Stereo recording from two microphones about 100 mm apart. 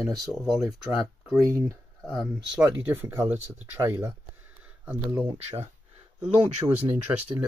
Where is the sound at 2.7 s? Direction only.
20° right (ahead or behind).